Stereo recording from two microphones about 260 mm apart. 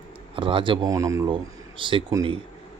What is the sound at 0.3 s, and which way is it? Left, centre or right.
Speech, centre.